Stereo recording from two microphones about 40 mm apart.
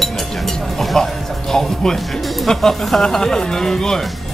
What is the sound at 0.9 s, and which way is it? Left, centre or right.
Speech, centre.